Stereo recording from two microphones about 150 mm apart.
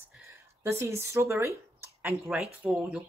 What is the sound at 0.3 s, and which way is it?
Speech, 15° right (ahead or behind).